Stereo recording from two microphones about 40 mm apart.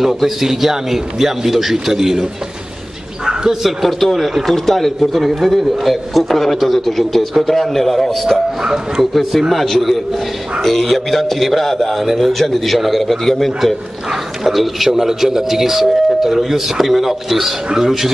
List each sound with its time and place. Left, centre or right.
0.0 s a man's voice: centre
3.3 s bird: centre
3.8 s a man's voice: centre
8.6 s a man's voice: centre
9.1 s a man's voice: centre